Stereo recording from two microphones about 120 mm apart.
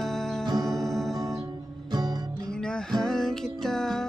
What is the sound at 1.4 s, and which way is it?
Music, 35° right (ahead or behind).